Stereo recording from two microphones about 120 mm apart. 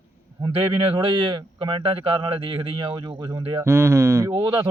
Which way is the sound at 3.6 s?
20° right (ahead or behind).